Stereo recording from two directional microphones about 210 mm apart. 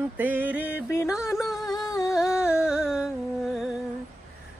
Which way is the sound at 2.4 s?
5° right (ahead or behind).